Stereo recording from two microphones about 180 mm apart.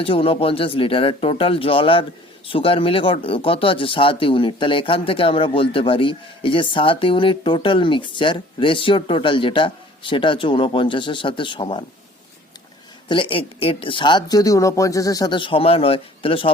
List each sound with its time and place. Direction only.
0.0 s speech: 30° left (ahead or behind)
13.1 s speech: 30° left (ahead or behind)